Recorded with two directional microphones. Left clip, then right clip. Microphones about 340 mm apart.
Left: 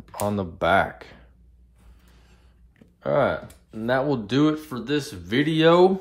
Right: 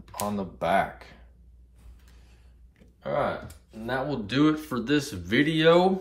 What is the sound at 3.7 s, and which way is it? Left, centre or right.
Speech, centre.